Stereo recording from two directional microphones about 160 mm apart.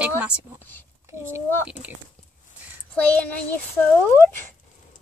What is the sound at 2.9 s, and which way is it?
A child's voice, 10° left (ahead or behind).